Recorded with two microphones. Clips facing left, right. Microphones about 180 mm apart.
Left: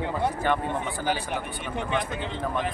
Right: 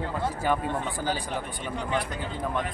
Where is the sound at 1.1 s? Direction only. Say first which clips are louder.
Left 2 dB; 20° left (ahead or behind).